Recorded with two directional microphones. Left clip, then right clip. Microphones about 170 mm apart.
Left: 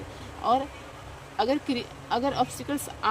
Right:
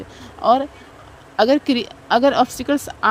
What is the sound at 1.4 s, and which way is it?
A woman's voice, 40° right (ahead or behind).